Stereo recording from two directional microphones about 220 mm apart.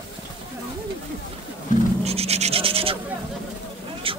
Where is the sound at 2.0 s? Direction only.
30° right (ahead or behind).